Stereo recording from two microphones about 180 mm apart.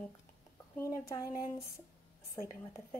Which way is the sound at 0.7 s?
20° left (ahead or behind).